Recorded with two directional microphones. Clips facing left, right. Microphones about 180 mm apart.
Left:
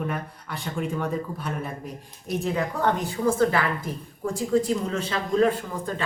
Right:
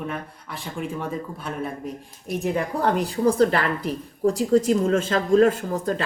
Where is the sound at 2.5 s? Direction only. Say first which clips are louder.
Right 3 dB; 35° right (ahead or behind).